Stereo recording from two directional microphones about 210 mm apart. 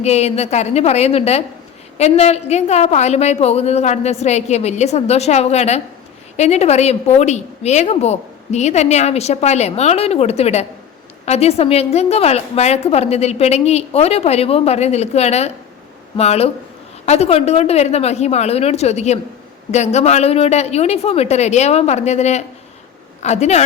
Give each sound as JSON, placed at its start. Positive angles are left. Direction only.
{"t": 0.0, "sound": "a woman's voice", "side_deg": 30}